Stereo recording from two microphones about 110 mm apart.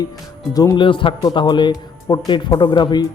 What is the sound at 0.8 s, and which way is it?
Speech, 50° left (ahead or behind).